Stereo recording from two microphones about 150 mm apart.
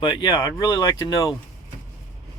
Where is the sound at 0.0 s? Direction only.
30° left (ahead or behind).